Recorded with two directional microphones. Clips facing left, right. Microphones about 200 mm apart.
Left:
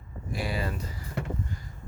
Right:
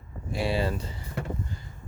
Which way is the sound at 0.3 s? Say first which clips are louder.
Right 5 dB; 25° right (ahead or behind).